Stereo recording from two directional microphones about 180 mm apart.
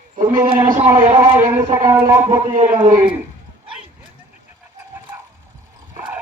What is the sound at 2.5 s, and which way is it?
Speech, 40° right (ahead or behind).